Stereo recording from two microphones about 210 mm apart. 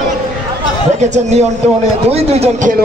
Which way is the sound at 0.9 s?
35° right (ahead or behind).